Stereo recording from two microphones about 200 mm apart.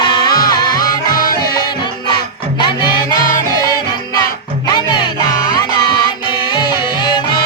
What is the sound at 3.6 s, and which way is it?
Music, 20° left (ahead or behind).